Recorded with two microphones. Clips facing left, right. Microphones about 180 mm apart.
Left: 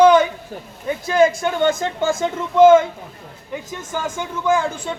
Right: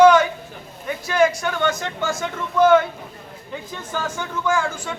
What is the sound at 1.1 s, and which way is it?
Speech, 25° left (ahead or behind).